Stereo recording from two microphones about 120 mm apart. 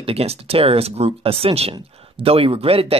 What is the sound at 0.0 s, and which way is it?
Speech, 55° right (ahead or behind).